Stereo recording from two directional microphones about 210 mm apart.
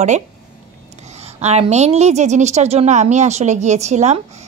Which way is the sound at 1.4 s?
30° right (ahead or behind).